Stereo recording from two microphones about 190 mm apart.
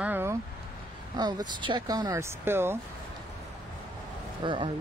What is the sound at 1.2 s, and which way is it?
Speech, 20° right (ahead or behind).